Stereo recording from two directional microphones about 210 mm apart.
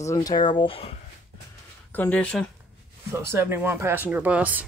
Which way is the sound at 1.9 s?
10° left (ahead or behind).